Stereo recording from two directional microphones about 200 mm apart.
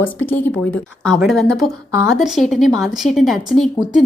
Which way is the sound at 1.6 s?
15° right (ahead or behind).